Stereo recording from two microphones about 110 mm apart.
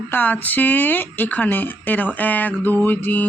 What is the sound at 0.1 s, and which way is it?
Mantra, 15° left (ahead or behind).